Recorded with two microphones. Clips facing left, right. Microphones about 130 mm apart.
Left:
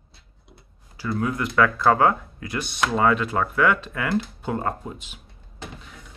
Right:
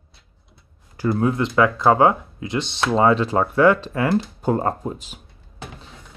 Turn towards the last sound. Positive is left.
turn(degrees=-40)  # may be behind; listen again after turning